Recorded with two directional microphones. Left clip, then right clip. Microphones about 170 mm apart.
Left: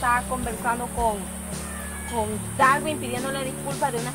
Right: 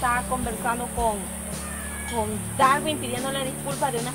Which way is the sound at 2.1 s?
Centre (ahead or behind).